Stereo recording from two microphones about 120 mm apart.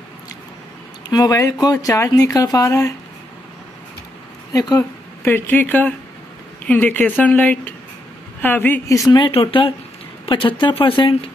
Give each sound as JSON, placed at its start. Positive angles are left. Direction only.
{"t": 1.0, "sound": "speech", "side_deg": 35}
{"t": 4.5, "sound": "speech", "side_deg": 30}
{"t": 5.2, "sound": "speech", "side_deg": 15}
{"t": 9.1, "sound": "speech", "side_deg": 45}